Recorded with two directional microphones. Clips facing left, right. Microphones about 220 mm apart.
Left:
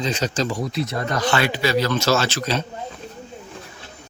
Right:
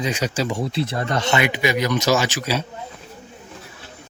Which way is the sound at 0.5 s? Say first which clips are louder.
Right 1 dB; 30° right (ahead or behind).